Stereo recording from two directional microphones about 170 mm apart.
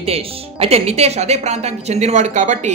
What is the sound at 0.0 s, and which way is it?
A woman's voice, 35° right (ahead or behind).